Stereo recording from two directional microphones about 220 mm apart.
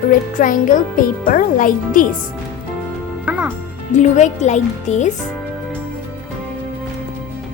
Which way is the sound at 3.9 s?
30° left (ahead or behind).